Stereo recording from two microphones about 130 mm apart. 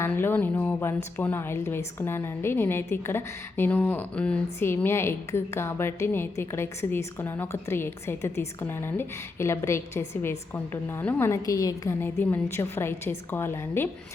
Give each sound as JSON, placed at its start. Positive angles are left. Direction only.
{"t": 0.0, "sound": "a woman's voice", "side_deg": 15}
{"t": 11.9, "sound": "a woman's voice", "side_deg": 15}